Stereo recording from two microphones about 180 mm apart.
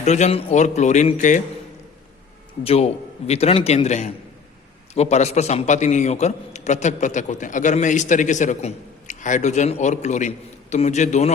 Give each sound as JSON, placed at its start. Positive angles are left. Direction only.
{"t": 0.0, "sound": "a man's voice", "side_deg": 40}
{"t": 2.6, "sound": "a man's voice", "side_deg": 35}